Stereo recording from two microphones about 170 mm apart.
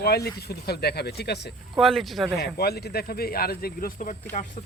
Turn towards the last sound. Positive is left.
turn(degrees=50)  # may be behind; listen again after turning